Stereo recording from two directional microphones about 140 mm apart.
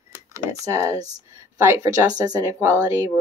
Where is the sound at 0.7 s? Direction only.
20° right (ahead or behind).